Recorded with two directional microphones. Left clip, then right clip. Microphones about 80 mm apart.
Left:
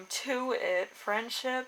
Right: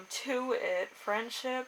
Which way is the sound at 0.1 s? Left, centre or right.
Left.